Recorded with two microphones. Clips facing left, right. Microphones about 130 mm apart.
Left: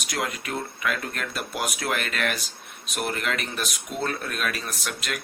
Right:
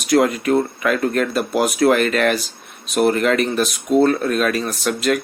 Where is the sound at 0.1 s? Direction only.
45° right (ahead or behind).